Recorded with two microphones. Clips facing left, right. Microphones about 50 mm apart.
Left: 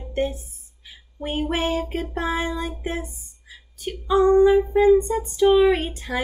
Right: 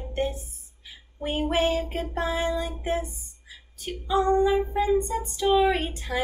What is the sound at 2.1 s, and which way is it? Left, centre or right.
Speech, left.